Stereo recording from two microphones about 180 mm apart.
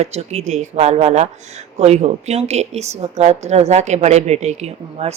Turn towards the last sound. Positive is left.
turn(degrees=-35)  # may be behind; listen again after turning